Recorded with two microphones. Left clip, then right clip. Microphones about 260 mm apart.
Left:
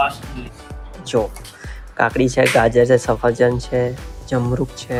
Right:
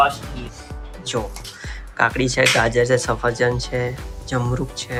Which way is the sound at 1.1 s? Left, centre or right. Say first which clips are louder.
Left 6 dB; centre.